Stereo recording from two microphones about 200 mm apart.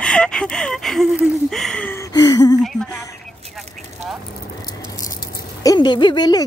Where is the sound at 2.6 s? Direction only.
5° left (ahead or behind).